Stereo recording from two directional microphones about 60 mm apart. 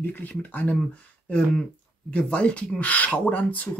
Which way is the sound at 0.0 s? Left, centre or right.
Left.